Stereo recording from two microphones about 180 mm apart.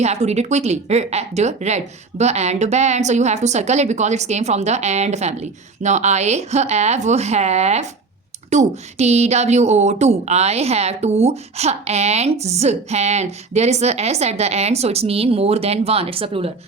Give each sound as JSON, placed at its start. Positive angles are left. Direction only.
{"t": 0.0, "sound": "a woman's voice", "side_deg": -40}